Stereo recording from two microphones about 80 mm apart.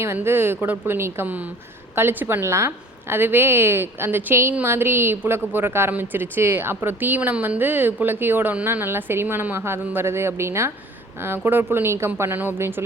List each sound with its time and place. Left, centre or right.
0.0 s a woman's voice: right